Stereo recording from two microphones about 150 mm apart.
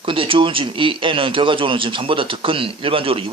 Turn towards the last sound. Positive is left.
turn(degrees=-40)  # may be behind; listen again after turning